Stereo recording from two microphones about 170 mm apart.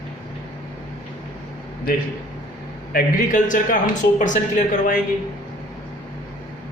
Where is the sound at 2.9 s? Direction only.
50° left (ahead or behind).